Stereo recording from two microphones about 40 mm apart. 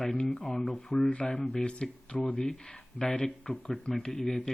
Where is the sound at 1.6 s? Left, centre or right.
Left.